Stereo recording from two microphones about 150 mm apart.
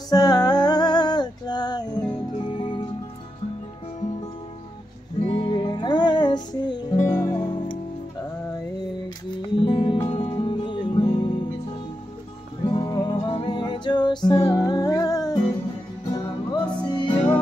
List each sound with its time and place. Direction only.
0.1 s music: 25° left (ahead or behind)
5.2 s music: 35° left (ahead or behind)
9.3 s music: 35° left (ahead or behind)
12.6 s music: 35° left (ahead or behind)